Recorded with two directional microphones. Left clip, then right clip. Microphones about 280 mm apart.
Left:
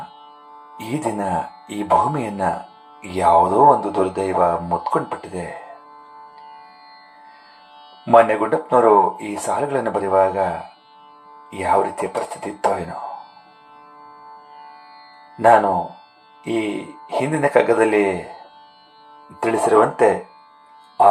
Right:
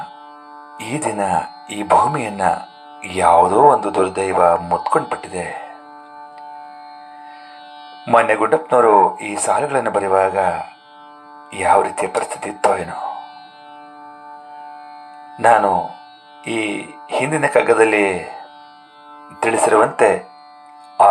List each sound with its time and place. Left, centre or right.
0.8 s speech: right
8.0 s speech: right
11.5 s speech: right
15.4 s speech: right
19.4 s speech: right